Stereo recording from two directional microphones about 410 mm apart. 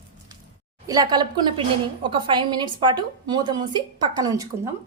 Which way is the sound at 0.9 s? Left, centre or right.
Centre.